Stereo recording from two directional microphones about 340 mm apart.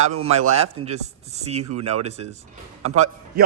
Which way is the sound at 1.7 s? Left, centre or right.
Right.